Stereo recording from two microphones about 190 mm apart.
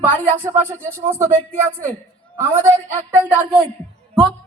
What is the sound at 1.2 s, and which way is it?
Speech, 35° right (ahead or behind).